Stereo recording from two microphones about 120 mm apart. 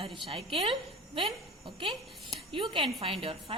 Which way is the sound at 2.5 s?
45° right (ahead or behind).